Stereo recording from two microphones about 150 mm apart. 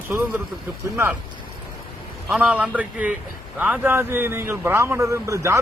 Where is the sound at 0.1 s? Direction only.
15° right (ahead or behind).